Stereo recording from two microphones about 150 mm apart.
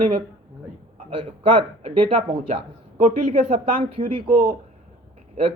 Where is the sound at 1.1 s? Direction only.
40° right (ahead or behind).